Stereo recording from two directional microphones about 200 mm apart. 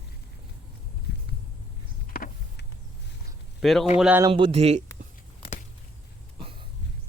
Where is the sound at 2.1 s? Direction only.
45° left (ahead or behind).